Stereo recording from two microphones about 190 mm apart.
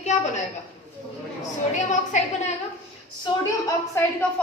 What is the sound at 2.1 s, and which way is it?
Speech, 40° left (ahead or behind).